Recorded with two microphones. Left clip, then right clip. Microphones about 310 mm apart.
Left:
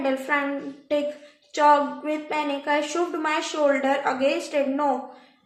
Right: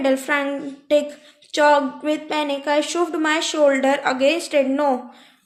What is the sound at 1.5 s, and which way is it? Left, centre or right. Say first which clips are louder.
A woman's voice: right 2 dB; right.